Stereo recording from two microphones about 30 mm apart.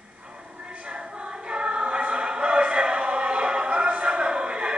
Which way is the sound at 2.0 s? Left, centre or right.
Right.